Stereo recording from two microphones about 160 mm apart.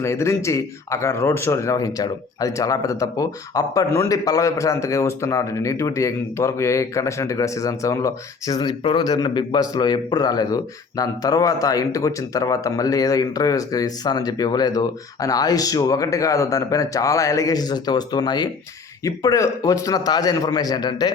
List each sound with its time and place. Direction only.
0.0 s speech: 15° left (ahead or behind)